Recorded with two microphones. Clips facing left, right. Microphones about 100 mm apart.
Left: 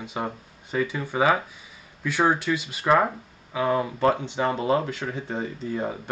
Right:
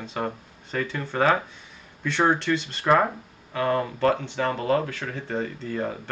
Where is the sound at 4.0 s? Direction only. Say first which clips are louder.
Even; 15° left (ahead or behind).